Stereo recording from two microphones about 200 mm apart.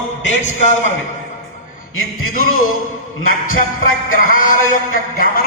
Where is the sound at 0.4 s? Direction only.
35° left (ahead or behind).